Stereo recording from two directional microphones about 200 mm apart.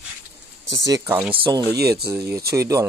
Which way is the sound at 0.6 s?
15° right (ahead or behind).